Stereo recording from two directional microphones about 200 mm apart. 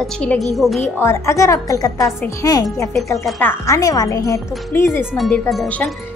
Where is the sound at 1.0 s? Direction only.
15° left (ahead or behind).